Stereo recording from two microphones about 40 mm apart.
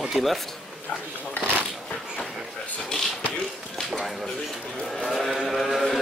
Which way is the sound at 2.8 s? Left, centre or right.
Centre.